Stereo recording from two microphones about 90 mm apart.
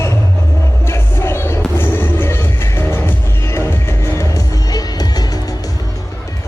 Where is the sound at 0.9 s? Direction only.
30° left (ahead or behind); by 5.5 s 45° left (ahead or behind).